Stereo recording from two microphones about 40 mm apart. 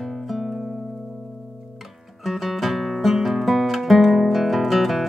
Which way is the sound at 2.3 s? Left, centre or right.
Centre.